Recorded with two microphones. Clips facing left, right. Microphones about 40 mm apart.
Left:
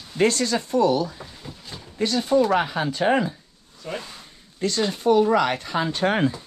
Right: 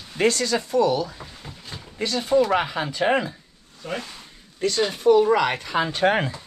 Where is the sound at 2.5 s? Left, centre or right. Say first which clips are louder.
Left 1 dB; right.